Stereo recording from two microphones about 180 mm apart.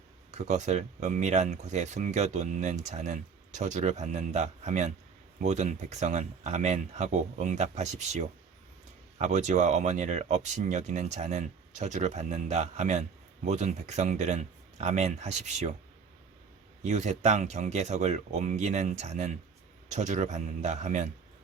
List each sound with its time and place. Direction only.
0.3 s speech: 40° right (ahead or behind)
16.8 s speech: 40° right (ahead or behind)